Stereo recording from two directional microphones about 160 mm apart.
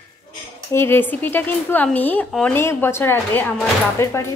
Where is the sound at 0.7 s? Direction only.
15° left (ahead or behind).